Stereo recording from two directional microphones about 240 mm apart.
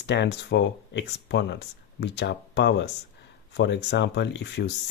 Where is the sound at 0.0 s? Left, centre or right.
Left.